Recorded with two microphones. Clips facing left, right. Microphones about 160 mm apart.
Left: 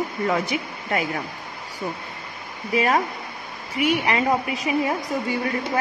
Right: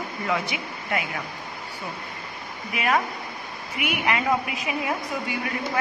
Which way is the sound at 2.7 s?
35° left (ahead or behind).